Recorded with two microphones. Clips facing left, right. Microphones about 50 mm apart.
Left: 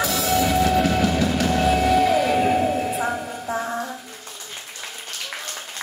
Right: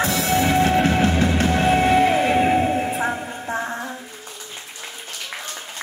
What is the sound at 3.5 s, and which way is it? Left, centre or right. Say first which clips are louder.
Music: even; right.